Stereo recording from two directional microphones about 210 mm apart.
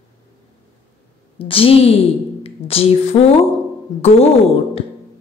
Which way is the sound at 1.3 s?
25° left (ahead or behind).